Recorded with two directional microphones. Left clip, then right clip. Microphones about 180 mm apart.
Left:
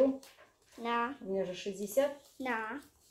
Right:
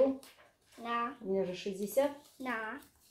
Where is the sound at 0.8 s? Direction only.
60° left (ahead or behind).